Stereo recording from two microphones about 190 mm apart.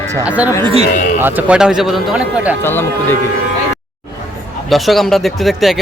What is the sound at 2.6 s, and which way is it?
Speech, 10° left (ahead or behind).